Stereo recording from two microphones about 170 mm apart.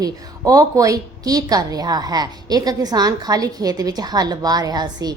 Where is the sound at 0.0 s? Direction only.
20° right (ahead or behind).